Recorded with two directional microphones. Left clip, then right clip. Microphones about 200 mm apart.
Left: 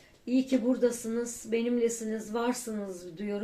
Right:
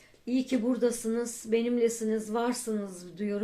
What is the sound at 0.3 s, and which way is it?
Speech, 35° right (ahead or behind).